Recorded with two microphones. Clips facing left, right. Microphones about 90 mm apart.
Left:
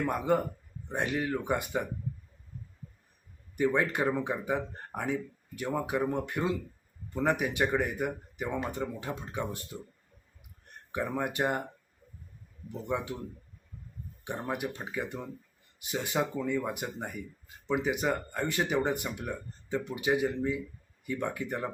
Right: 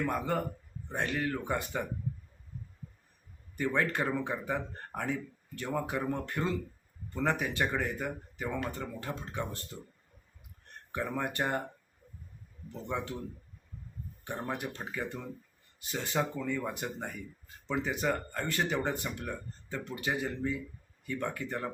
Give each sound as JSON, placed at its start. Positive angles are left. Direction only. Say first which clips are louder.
{"t": 0.0, "sound": "speech", "louder": "left 4 dB", "side_deg": 10}
{"t": 3.5, "sound": "speech", "louder": "left 3 dB", "side_deg": 15}
{"t": 10.9, "sound": "speech", "louder": "left 2 dB", "side_deg": 15}
{"t": 12.6, "sound": "speech", "louder": "left 3 dB", "side_deg": 15}
{"t": 14.3, "sound": "speech", "louder": "left 2 dB", "side_deg": 10}